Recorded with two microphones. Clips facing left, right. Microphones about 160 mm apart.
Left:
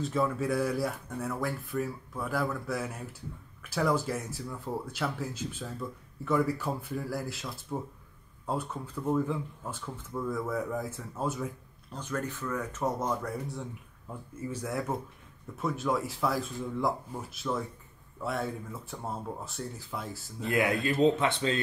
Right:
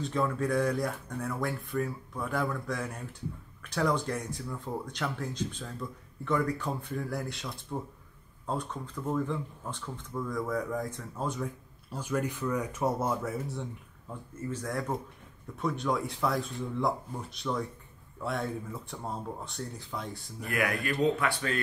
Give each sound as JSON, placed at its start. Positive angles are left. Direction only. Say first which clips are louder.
{"t": 0.0, "sound": "speech", "louder": "left 1 dB", "side_deg": 5}
{"t": 11.9, "sound": "speech", "louder": "right 3 dB", "side_deg": -10}
{"t": 20.3, "sound": "speech", "louder": "left 3 dB", "side_deg": 25}